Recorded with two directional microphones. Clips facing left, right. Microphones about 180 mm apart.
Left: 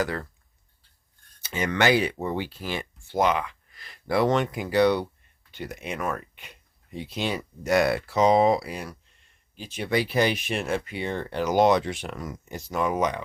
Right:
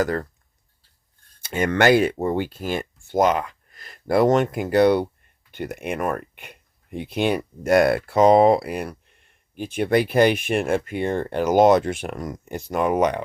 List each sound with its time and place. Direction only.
0.0 s speech: 45° right (ahead or behind)
1.4 s speech: 50° right (ahead or behind)